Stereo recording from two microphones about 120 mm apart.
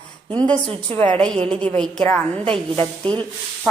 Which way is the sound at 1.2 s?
5° left (ahead or behind).